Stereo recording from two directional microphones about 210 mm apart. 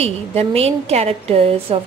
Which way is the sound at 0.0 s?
30° right (ahead or behind).